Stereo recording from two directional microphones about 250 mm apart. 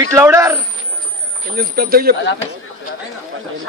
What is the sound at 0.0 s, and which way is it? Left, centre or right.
Speech, centre.